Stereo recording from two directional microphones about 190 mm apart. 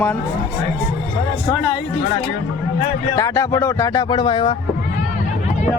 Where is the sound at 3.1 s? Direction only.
15° left (ahead or behind).